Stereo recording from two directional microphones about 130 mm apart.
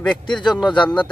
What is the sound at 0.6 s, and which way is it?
Speech, 35° left (ahead or behind).